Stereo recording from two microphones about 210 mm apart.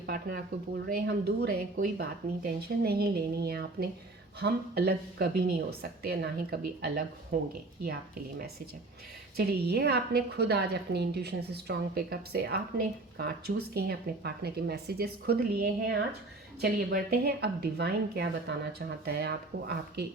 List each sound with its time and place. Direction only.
0.0 s a woman's voice: 45° right (ahead or behind)